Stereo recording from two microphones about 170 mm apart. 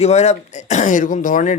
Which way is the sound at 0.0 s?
40° left (ahead or behind).